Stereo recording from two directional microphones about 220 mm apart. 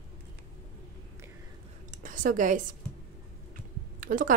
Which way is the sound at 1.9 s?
35° right (ahead or behind).